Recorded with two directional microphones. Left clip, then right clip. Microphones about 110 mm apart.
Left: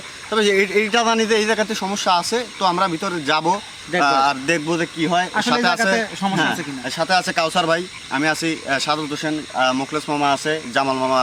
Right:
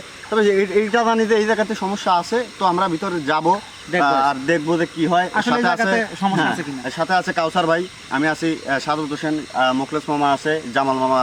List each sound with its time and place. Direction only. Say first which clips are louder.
0.3 s speech: even; 15° left (ahead or behind)
5.3 s speech: even; centre (ahead or behind)